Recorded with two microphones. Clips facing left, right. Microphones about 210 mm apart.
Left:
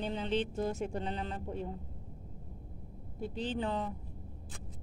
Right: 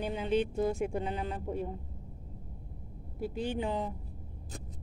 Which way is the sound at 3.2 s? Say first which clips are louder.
Right 2 dB; 10° right (ahead or behind).